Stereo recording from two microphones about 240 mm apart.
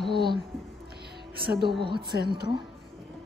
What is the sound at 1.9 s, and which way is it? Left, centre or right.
Speech, right.